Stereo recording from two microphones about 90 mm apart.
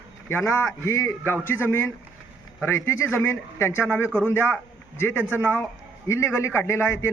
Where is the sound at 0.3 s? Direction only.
25° left (ahead or behind).